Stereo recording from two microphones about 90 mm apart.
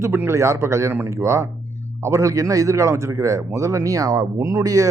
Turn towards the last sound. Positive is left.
turn(degrees=-40)  # may be behind; listen again after turning